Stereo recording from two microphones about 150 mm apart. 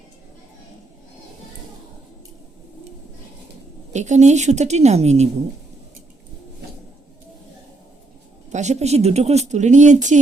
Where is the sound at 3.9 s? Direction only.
50° right (ahead or behind).